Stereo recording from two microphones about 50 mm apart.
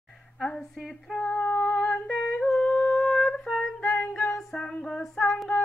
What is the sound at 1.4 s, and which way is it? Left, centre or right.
Female singing, left.